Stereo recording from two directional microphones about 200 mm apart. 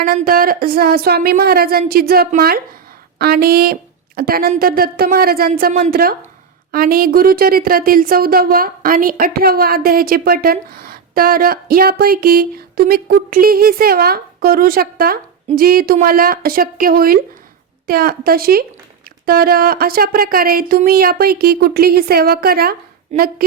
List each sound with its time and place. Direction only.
0.0 s speech: 45° right (ahead or behind)